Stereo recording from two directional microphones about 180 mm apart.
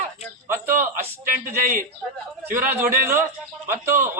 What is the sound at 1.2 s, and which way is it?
Speech, 50° right (ahead or behind).